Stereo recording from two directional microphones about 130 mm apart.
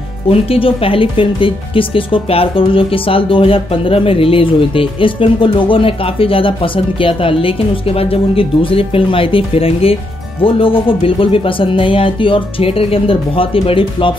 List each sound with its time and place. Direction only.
0.3 s speech: 45° left (ahead or behind)